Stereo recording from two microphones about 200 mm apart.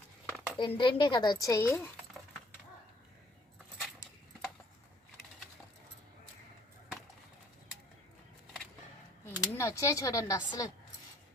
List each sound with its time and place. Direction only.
0.3 s a sound: 5° left (ahead or behind)
0.6 s speech: 25° left (ahead or behind)
9.2 s speech: 15° left (ahead or behind)